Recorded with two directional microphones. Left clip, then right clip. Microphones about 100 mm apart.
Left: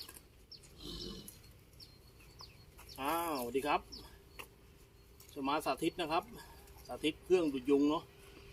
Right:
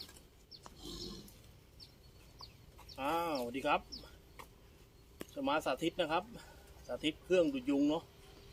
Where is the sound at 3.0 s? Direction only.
30° right (ahead or behind).